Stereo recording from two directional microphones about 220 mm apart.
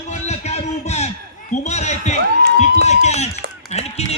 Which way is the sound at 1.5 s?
30° left (ahead or behind).